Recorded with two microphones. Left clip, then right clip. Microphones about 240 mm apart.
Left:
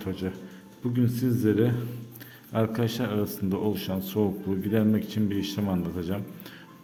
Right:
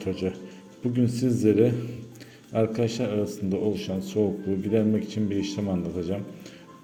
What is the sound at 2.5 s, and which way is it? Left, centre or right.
Speech, centre.